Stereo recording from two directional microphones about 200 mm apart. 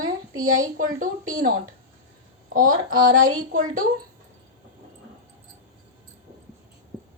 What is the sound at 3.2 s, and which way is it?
Speech, 45° right (ahead or behind).